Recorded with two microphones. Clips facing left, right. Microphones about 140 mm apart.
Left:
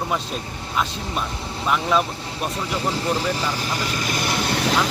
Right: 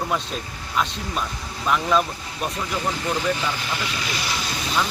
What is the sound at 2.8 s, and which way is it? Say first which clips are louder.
Speech: left 2 dB; 30° left (ahead or behind).